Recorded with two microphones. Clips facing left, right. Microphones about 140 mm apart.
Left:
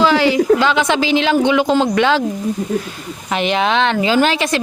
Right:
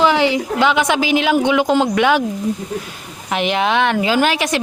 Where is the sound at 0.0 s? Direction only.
20° right (ahead or behind).